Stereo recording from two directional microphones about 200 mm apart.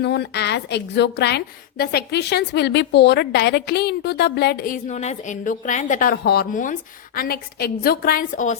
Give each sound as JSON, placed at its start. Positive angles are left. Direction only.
{"t": 0.0, "sound": "a woman's voice", "side_deg": 55}